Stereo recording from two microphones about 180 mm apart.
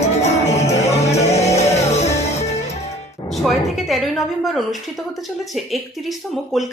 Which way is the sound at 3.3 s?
Centre (ahead or behind).